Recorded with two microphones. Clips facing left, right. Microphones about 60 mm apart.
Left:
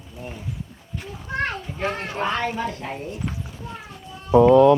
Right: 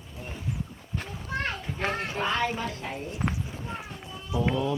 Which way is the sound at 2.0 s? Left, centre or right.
Left.